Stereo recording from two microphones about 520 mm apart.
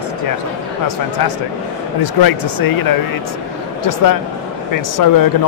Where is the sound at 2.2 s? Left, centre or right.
Left.